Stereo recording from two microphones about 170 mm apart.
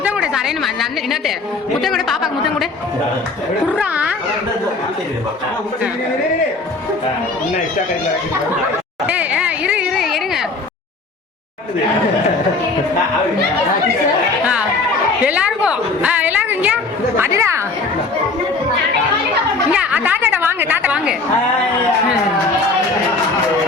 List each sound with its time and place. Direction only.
0.0 s a woman's voice: 5° right (ahead or behind)
3.8 s a woman's voice: 10° right (ahead or behind)
9.0 s a sound: 10° right (ahead or behind)
15.2 s a woman's voice: 10° right (ahead or behind)
19.7 s a woman's voice: 5° right (ahead or behind)